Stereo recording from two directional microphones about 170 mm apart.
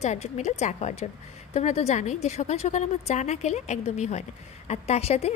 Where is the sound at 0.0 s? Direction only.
40° left (ahead or behind).